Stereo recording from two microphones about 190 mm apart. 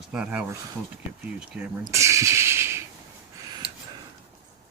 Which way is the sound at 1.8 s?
15° right (ahead or behind).